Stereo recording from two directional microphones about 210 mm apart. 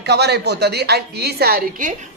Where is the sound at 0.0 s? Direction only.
50° right (ahead or behind).